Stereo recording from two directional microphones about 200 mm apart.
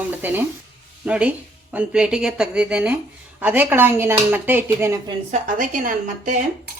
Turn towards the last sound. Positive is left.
turn(degrees=-40)  # may be behind; listen again after turning